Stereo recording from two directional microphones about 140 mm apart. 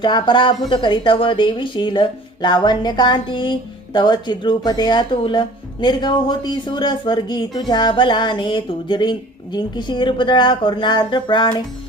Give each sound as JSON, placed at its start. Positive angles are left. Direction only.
{"t": 0.0, "sound": "speech", "side_deg": 35}